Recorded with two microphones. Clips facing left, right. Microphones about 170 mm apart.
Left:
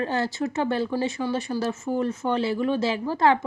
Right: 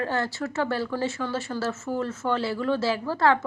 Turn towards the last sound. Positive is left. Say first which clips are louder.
# left 1 dB
turn(degrees=20)  # may be behind; listen again after turning